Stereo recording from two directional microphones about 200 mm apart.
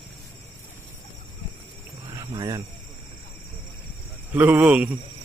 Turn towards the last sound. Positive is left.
turn(degrees=-5)  # may be behind; listen again after turning